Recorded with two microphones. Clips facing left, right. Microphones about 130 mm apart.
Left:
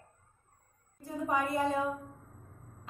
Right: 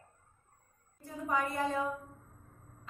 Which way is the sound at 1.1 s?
15° left (ahead or behind).